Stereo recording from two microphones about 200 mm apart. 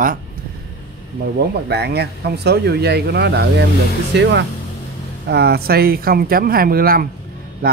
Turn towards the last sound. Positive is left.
turn(degrees=-50)  # may be behind; listen again after turning